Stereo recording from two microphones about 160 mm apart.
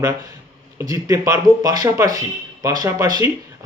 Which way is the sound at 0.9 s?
20° right (ahead or behind).